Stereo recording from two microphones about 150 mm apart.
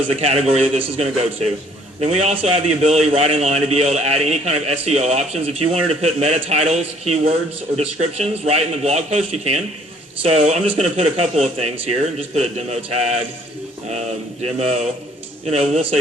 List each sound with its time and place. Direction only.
0.1 s a man's voice: 45° right (ahead or behind)